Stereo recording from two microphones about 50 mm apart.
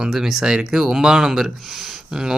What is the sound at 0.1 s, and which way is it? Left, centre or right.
Speech, centre.